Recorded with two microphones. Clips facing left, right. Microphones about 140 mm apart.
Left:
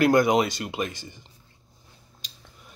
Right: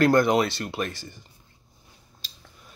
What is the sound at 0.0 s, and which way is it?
Speech, 10° left (ahead or behind).